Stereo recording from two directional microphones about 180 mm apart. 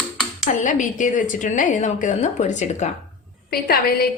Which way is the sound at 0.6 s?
45° left (ahead or behind).